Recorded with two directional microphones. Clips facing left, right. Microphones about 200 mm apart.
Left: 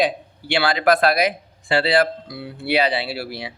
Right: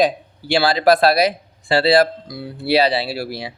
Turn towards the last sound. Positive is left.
turn(degrees=-40)  # may be behind; listen again after turning